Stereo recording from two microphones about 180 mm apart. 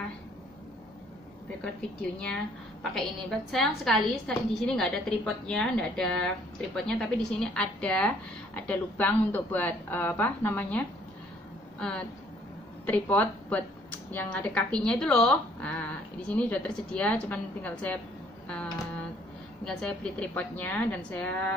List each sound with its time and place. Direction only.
1.6 s a woman's voice: 5° left (ahead or behind)
19.6 s speech: 5° left (ahead or behind)